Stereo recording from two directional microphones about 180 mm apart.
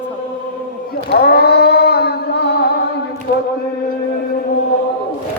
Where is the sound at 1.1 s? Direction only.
60° left (ahead or behind).